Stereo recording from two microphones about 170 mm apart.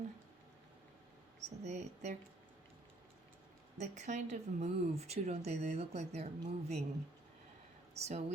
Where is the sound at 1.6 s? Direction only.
45° right (ahead or behind).